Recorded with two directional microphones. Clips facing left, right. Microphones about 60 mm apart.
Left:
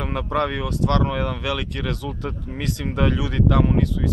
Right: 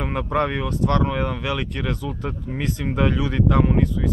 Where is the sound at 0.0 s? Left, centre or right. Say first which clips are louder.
Right 1 dB; centre.